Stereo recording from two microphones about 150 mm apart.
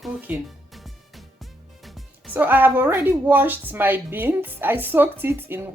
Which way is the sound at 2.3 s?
10° right (ahead or behind).